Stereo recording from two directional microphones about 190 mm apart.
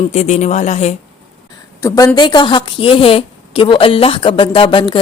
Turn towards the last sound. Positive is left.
turn(degrees=25)  # may be behind; listen again after turning